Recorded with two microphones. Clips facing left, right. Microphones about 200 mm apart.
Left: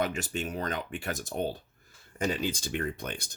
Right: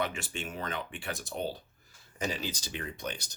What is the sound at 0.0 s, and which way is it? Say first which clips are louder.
Speech: left 4 dB; 40° left (ahead or behind).